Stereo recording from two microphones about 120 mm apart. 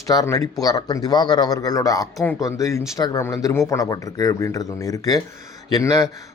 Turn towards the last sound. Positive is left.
turn(degrees=30)  # may be behind; listen again after turning